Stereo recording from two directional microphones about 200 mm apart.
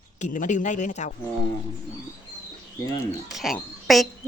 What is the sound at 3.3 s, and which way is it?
Speech, centre (ahead or behind).